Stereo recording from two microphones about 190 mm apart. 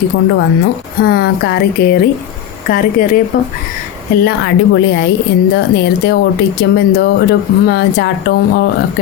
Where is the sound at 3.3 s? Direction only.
50° left (ahead or behind).